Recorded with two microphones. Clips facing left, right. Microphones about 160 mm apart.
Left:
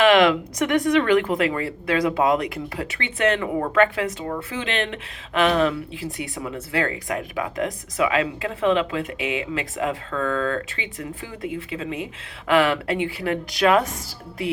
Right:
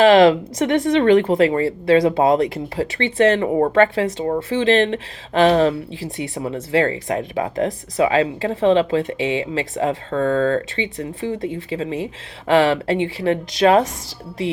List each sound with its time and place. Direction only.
0.0 s speech: 30° right (ahead or behind)